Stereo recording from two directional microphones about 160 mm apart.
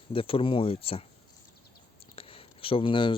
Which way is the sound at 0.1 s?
35° left (ahead or behind).